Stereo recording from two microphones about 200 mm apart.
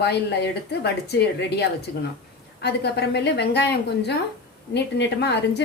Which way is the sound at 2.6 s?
55° left (ahead or behind).